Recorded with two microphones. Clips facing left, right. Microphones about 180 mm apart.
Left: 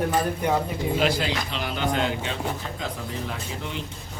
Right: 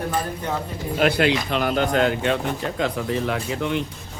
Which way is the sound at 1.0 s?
65° right (ahead or behind).